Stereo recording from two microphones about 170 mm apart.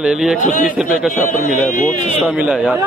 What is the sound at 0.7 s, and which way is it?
Speech, 5° right (ahead or behind).